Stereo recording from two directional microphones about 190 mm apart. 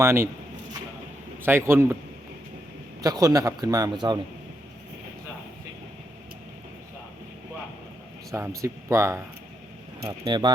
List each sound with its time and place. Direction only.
0.0 s speech: 15° right (ahead or behind)
1.5 s speech: 10° right (ahead or behind)
3.0 s a man's voice: 20° right (ahead or behind)
8.3 s a man's voice: 15° right (ahead or behind)